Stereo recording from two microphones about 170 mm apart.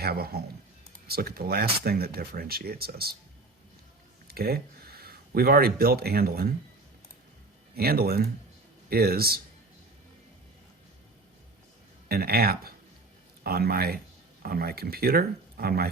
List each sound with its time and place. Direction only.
0.0 s speech: 65° right (ahead or behind)
4.3 s speech: 65° right (ahead or behind)
7.8 s speech: 65° right (ahead or behind)
12.0 s speech: 65° right (ahead or behind)